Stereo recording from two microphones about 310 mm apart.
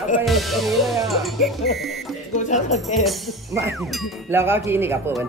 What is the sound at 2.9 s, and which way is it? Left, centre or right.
Speech, centre.